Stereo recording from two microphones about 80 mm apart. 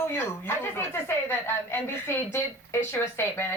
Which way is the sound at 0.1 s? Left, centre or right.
Left.